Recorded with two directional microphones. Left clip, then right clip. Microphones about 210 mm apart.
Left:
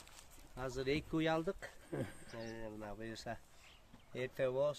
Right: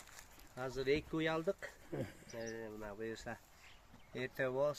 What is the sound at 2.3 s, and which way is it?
Speech, 60° left (ahead or behind).